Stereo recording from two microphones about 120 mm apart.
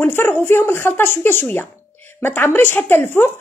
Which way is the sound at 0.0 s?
15° left (ahead or behind).